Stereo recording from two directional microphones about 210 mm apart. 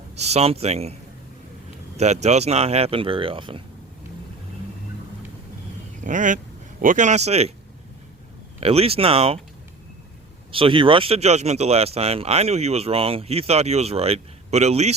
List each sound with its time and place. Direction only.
0.2 s speech: 30° right (ahead or behind)
2.0 s speech: 35° right (ahead or behind)
6.0 s speech: 35° right (ahead or behind)
8.6 s speech: 30° right (ahead or behind)
10.5 s speech: 25° right (ahead or behind)